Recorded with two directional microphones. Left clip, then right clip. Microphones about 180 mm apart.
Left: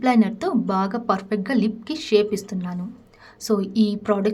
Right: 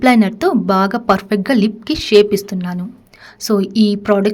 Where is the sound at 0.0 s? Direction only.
35° right (ahead or behind).